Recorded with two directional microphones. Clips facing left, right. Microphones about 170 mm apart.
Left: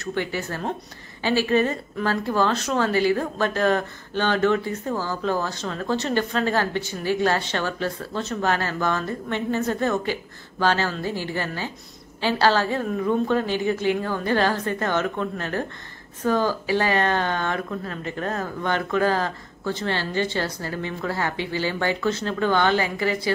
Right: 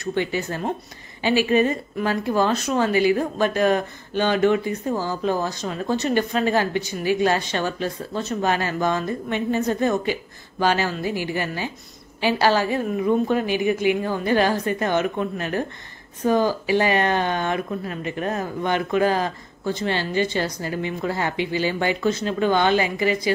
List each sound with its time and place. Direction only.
0.0 s speech: 20° right (ahead or behind)